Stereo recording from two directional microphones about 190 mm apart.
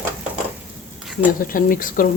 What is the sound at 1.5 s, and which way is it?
Speech, 45° left (ahead or behind).